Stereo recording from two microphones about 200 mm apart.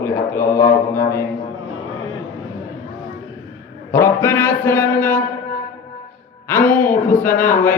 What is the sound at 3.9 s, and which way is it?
Speech, 10° left (ahead or behind).